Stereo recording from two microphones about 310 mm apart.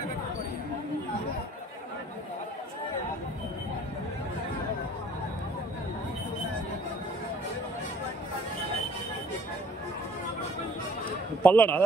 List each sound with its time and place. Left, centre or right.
11.4 s a man's voice: centre